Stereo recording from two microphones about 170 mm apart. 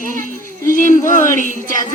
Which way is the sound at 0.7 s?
50° left (ahead or behind).